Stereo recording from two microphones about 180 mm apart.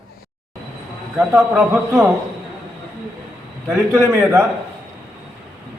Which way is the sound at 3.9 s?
15° right (ahead or behind).